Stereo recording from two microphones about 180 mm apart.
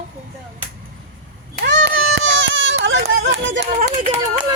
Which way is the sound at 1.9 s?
90° right.